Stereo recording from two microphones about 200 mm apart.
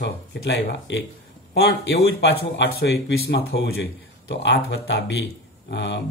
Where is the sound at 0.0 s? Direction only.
60° left (ahead or behind).